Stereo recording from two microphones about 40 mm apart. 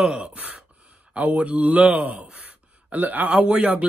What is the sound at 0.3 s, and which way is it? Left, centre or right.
Gasp, right.